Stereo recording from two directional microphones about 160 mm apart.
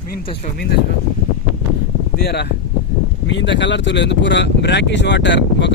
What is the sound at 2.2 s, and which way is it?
Speech, 90° left.